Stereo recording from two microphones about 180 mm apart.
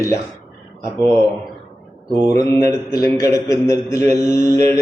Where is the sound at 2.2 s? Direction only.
20° left (ahead or behind).